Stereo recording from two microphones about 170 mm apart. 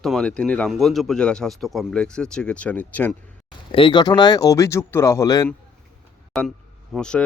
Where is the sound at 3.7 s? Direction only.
30° left (ahead or behind).